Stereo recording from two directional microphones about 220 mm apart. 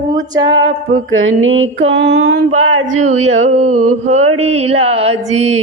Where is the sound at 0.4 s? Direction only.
60° right (ahead or behind).